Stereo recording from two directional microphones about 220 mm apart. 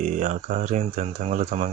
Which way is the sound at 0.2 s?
35° right (ahead or behind).